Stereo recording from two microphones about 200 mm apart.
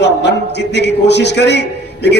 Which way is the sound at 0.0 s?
60° left (ahead or behind).